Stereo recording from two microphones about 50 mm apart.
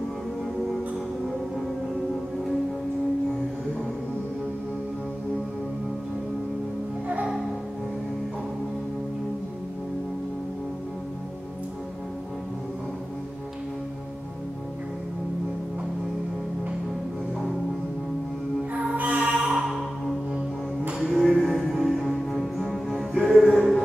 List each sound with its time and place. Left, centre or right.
18.9 s music: right
21.0 s music: centre
22.9 s music: centre
23.4 s music: centre